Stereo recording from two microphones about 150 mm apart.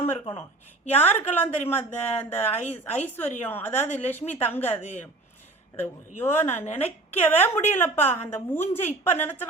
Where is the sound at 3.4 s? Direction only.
15° left (ahead or behind).